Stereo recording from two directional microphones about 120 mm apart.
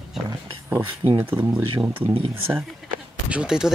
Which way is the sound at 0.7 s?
20° right (ahead or behind).